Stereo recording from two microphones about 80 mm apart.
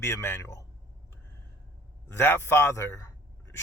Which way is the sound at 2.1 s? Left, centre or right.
Left.